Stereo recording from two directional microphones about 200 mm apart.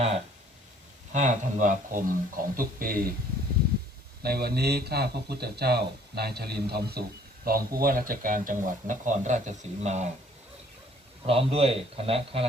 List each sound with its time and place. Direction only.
1.1 s speech: 40° right (ahead or behind)
4.2 s speech: 50° right (ahead or behind); by 10.1 s 35° right (ahead or behind)
11.3 s a man's voice: 30° right (ahead or behind)